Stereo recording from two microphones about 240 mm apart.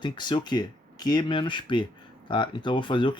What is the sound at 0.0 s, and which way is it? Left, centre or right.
Speech, centre.